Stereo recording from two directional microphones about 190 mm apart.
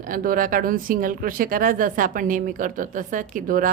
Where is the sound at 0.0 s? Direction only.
45° right (ahead or behind).